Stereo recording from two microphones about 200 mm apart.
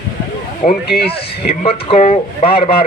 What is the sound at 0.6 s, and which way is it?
Speech, 50° left (ahead or behind).